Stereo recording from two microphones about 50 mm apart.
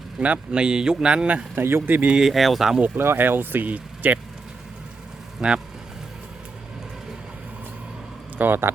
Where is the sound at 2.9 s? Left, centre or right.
Right.